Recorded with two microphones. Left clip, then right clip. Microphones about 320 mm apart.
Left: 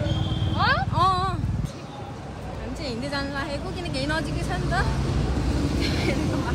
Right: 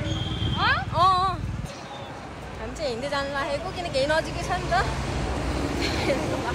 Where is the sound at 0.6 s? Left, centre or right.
Left.